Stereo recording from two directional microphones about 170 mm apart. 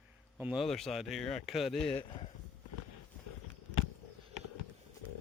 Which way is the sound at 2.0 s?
35° left (ahead or behind).